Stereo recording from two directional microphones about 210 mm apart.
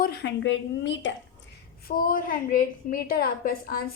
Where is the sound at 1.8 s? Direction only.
45° left (ahead or behind).